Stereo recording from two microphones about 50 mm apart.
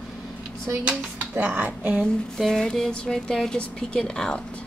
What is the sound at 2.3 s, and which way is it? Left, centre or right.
Speech, centre.